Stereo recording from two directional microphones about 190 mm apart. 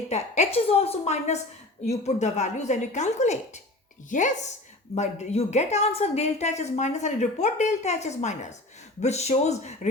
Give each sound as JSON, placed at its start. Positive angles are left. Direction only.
{"t": 0.1, "sound": "a woman's voice", "side_deg": 35}